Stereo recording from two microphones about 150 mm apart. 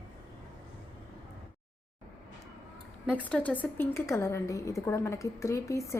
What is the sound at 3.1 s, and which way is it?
A woman's voice, 10° left (ahead or behind).